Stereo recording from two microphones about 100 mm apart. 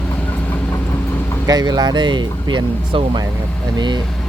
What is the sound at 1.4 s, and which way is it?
Speech, 40° right (ahead or behind).